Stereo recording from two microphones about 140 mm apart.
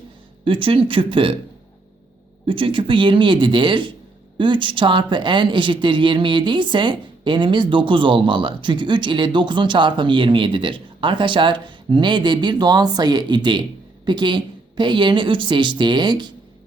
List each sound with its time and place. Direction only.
0.4 s speech: 40° right (ahead or behind)
2.5 s speech: 40° right (ahead or behind)